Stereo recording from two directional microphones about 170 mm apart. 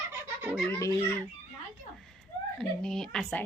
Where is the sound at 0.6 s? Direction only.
15° left (ahead or behind).